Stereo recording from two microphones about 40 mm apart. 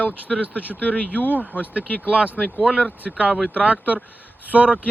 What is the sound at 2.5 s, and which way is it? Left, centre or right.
Speech, right.